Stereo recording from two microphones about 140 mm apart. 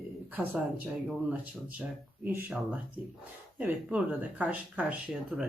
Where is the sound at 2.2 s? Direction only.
10° right (ahead or behind).